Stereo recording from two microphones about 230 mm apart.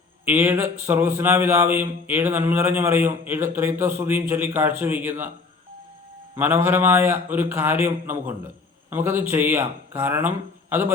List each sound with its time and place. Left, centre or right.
0.3 s speech: centre
6.3 s speech: centre